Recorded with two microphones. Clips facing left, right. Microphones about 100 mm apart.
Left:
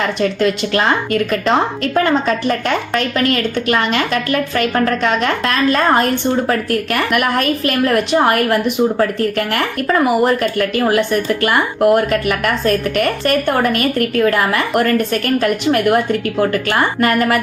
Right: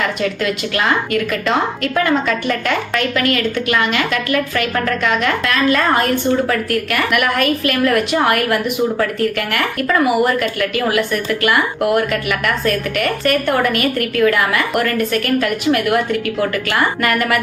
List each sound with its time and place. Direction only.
0.0 s speech: 35° left (ahead or behind)